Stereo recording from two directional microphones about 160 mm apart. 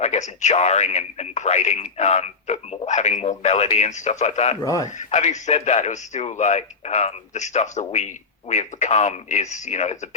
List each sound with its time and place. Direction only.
0.0 s speech: 45° left (ahead or behind)
4.6 s a man's voice: 20° left (ahead or behind)
4.9 s speech: 45° left (ahead or behind)